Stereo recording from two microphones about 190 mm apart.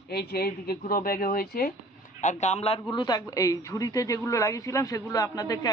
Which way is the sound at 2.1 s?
35° left (ahead or behind).